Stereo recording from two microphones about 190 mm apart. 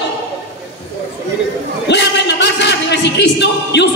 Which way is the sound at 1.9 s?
65° left (ahead or behind).